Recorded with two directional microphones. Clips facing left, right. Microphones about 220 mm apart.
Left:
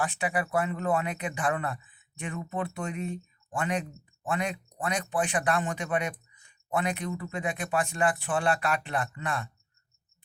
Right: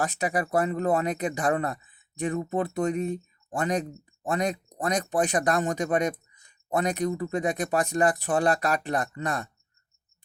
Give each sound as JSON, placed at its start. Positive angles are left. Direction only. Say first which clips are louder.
{"t": 0.0, "sound": "speech", "louder": "right 3 dB", "side_deg": -40}